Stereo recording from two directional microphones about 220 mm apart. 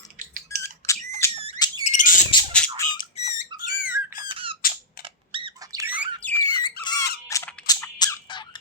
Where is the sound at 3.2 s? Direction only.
30° left (ahead or behind).